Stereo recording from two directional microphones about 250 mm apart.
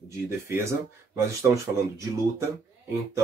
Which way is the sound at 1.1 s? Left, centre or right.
Centre.